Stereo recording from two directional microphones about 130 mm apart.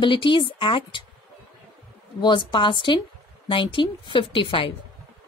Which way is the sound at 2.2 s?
35° left (ahead or behind).